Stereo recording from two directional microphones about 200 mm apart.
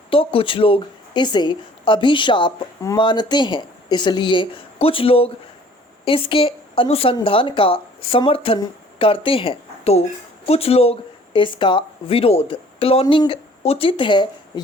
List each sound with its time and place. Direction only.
0.1 s a woman's voice: 25° left (ahead or behind)